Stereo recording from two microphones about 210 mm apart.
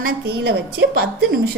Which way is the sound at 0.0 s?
50° right (ahead or behind).